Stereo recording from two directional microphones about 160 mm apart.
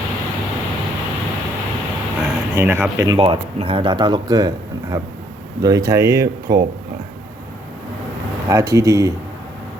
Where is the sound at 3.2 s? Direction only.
35° right (ahead or behind); by 6.5 s 20° right (ahead or behind).